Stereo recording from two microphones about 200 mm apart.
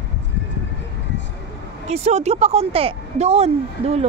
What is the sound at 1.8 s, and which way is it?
A woman's voice, 30° right (ahead or behind).